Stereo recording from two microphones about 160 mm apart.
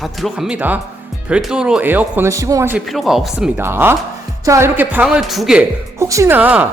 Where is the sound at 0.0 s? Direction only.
Centre (ahead or behind); by 2.7 s 20° right (ahead or behind).